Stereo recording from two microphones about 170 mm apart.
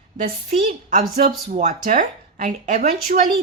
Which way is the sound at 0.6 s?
50° right (ahead or behind).